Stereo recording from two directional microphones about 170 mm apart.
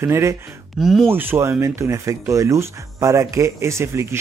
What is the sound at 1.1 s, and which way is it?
A man's voice, 15° right (ahead or behind).